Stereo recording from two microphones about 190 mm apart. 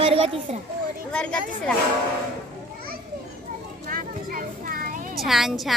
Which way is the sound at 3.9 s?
45° right (ahead or behind).